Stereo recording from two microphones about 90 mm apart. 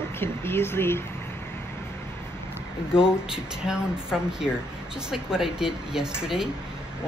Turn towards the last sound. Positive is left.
turn(degrees=-5)  # may be behind; listen again after turning